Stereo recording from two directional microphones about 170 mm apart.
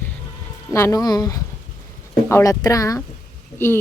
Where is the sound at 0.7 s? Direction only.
15° left (ahead or behind).